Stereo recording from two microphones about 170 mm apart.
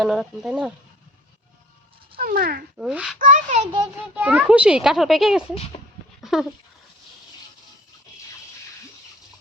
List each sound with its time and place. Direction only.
0.0 s a child's voice: centre (ahead or behind)
2.1 s speech: 60° right (ahead or behind)
2.7 s a child's voice: 5° right (ahead or behind)
3.2 s a child's voice: 50° right (ahead or behind)
4.1 s a child's voice: 10° right (ahead or behind)
6.3 s dog: centre (ahead or behind)